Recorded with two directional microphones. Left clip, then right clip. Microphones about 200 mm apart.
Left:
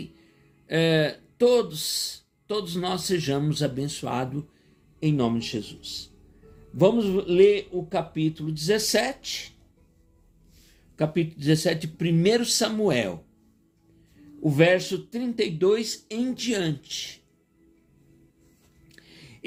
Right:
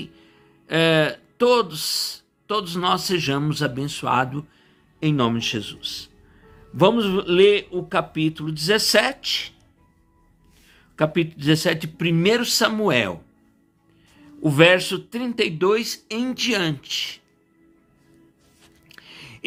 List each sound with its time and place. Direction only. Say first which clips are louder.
0.7 s a man's voice: right 4 dB; 15° right (ahead or behind)
10.9 s speech: right 5 dB; 15° right (ahead or behind)
14.4 s speech: right 5 dB; 15° right (ahead or behind)
18.9 s a sound: right 8 dB; 15° right (ahead or behind)